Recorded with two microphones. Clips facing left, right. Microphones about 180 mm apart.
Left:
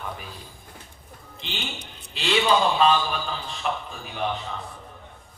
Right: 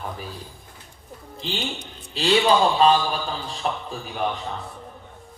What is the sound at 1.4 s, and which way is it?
A man's voice, 35° right (ahead or behind).